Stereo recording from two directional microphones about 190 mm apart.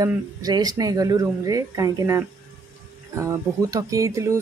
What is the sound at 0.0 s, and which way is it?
Speech, 20° right (ahead or behind).